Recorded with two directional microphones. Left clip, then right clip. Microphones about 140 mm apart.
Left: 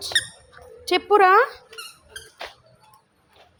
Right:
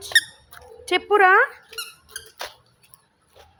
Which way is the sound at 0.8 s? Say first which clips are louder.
Even; 15° left (ahead or behind).